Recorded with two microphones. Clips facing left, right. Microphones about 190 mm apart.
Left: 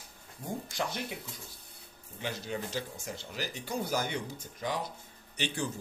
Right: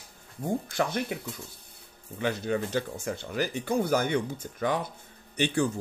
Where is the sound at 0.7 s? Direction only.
55° right (ahead or behind).